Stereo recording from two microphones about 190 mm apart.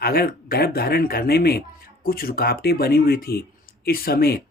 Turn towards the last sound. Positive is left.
turn(degrees=55)  # may be behind; listen again after turning